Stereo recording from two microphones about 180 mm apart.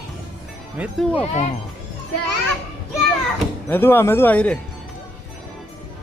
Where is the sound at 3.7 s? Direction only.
10° left (ahead or behind).